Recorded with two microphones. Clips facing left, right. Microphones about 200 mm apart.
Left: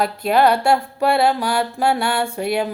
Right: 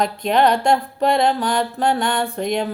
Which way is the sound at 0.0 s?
5° left (ahead or behind).